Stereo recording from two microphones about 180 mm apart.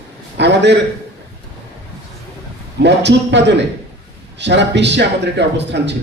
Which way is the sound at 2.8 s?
75° right (ahead or behind).